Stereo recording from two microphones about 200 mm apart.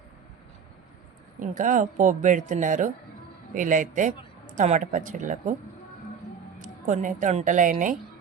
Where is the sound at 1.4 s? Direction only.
40° right (ahead or behind).